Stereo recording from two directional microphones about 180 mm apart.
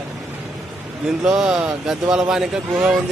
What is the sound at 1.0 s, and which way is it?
Speech, 5° right (ahead or behind).